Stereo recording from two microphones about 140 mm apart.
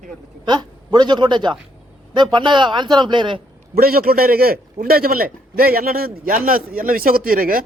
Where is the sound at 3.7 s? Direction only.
90° right.